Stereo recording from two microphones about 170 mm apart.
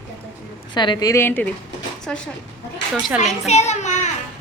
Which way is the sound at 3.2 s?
40° left (ahead or behind).